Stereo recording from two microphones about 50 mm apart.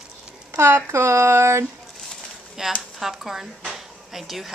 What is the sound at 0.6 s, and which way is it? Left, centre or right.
Speech, right.